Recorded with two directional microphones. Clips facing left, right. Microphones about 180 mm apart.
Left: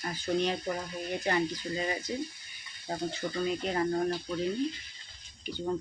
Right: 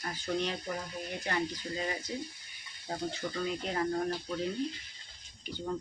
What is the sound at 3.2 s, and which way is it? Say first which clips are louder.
Speech: left 3 dB; 25° left (ahead or behind).